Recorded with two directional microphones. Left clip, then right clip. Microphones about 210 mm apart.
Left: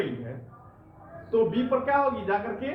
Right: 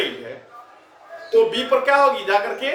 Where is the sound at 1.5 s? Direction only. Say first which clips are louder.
Right 8 dB; 10° right (ahead or behind).